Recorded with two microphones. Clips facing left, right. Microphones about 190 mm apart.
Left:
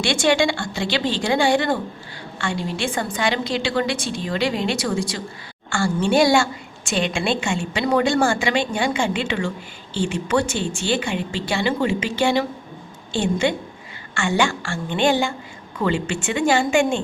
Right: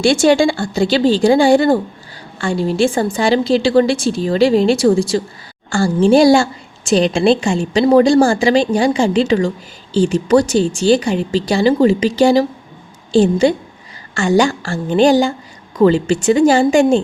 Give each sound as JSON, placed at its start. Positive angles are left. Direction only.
{"t": 0.0, "sound": "a woman's voice", "side_deg": -35}